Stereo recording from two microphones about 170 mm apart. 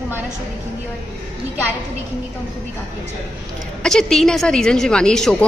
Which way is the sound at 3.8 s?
5° left (ahead or behind).